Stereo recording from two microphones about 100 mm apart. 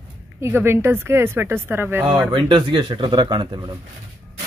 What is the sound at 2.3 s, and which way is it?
Speech, 55° right (ahead or behind).